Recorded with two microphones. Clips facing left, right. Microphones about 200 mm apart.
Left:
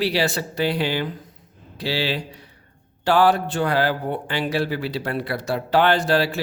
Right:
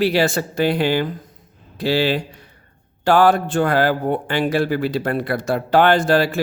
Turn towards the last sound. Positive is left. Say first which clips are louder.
# right 4 dB
turn(degrees=-50)  # may be behind; listen again after turning